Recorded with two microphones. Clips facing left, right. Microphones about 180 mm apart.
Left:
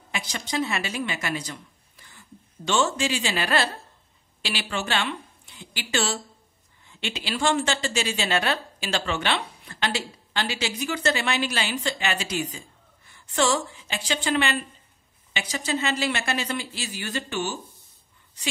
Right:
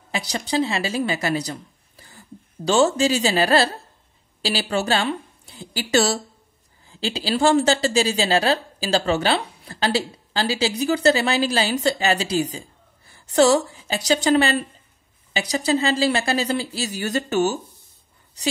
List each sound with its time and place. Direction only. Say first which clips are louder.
0.1 s a woman's voice: right 6 dB; 35° right (ahead or behind)